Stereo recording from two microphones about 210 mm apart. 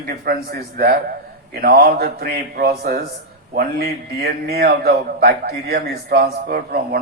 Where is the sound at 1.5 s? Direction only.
45° right (ahead or behind).